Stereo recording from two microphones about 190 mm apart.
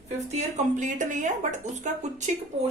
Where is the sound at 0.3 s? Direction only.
40° right (ahead or behind).